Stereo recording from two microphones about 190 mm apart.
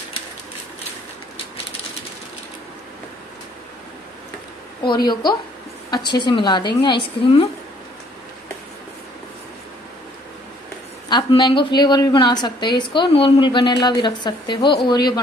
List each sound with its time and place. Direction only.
5.0 s a woman's voice: 25° left (ahead or behind)
11.1 s a woman's voice: 25° left (ahead or behind)